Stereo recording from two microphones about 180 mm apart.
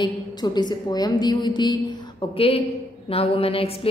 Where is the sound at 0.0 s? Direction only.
25° left (ahead or behind).